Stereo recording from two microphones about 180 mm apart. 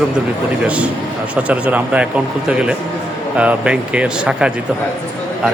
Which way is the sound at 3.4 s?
5° right (ahead or behind).